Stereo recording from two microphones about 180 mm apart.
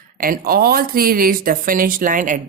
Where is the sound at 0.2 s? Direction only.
55° right (ahead or behind).